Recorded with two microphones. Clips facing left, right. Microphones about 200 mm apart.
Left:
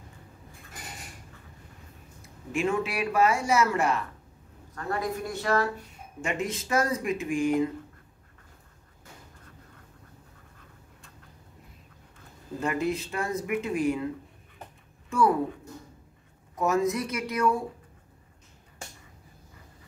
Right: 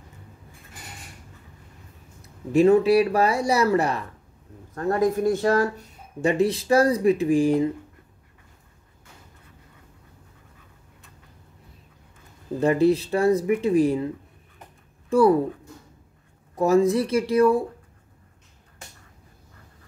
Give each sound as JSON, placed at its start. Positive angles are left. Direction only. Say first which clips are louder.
{"t": 2.2, "sound": "speech", "louder": "right 11 dB", "side_deg": -35}
{"t": 12.5, "sound": "speech", "louder": "right 9 dB", "side_deg": -35}
{"t": 15.0, "sound": "speech", "louder": "right 7 dB", "side_deg": -35}
{"t": 16.5, "sound": "speech", "louder": "right 7 dB", "side_deg": -35}